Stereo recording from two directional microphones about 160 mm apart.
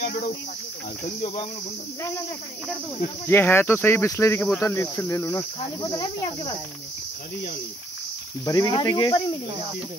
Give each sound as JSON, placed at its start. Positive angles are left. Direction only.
{"t": 3.3, "sound": "speech", "side_deg": 15}
{"t": 8.5, "sound": "speech", "side_deg": 25}